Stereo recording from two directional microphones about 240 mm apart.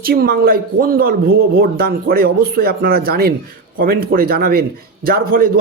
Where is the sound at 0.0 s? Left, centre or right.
Right.